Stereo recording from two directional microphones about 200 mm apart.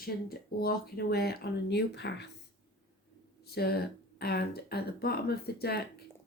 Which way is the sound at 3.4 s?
50° left (ahead or behind).